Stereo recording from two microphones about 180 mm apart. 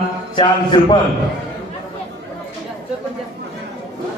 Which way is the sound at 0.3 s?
25° left (ahead or behind).